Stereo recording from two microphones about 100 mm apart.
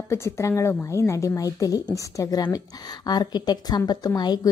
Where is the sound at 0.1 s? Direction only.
25° left (ahead or behind).